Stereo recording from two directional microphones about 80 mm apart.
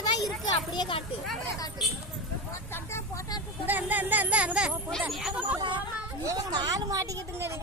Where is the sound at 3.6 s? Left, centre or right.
Right; by 5.4 s centre.